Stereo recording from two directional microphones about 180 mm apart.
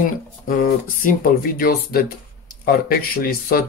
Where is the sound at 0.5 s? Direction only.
50° left (ahead or behind).